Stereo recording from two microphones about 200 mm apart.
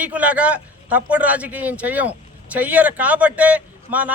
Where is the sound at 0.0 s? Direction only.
5° right (ahead or behind).